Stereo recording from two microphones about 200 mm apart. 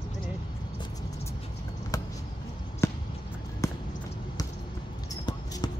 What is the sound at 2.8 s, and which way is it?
Basketball bounce, 15° left (ahead or behind).